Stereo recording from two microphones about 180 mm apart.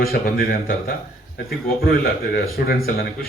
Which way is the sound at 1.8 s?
55° left (ahead or behind).